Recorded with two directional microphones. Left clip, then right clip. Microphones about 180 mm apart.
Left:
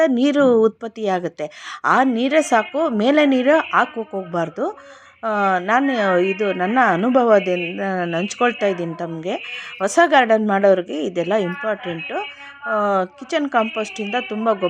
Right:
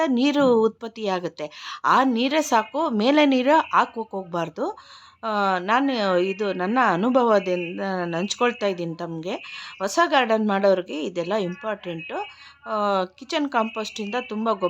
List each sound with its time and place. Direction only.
0.2 s speech: 10° left (ahead or behind)